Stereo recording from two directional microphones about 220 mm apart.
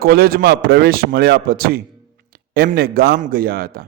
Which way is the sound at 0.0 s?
45° right (ahead or behind).